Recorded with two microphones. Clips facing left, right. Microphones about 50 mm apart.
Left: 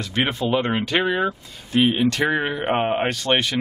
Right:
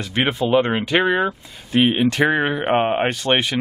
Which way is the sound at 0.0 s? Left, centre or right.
Centre.